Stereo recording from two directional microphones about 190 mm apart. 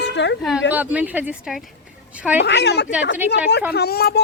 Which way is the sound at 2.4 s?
65° left (ahead or behind).